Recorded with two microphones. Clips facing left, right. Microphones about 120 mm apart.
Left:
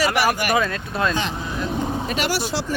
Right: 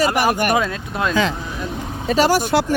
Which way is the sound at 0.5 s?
20° right (ahead or behind).